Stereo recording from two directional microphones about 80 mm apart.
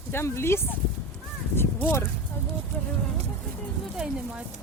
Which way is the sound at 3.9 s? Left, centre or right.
Centre.